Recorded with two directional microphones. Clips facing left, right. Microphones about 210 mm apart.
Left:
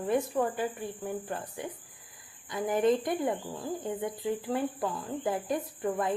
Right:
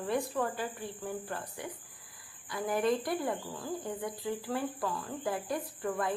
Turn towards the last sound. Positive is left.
turn(degrees=20)  # may be behind; listen again after turning